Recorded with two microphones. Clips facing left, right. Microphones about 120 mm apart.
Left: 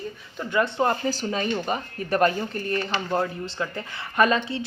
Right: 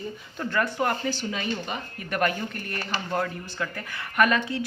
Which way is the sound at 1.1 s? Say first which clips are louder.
Left 4 dB; 40° left (ahead or behind).